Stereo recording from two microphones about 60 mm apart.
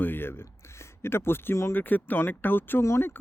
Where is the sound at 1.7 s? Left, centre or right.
Left.